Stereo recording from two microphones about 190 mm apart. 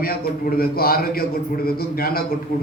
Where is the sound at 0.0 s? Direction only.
50° left (ahead or behind).